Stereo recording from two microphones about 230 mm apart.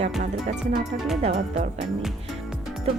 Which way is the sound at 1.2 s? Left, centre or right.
Right.